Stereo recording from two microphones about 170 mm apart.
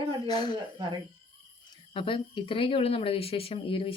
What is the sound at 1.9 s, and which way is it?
Speech, 30° left (ahead or behind).